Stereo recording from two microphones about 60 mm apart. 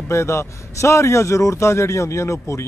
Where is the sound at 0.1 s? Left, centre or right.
Left.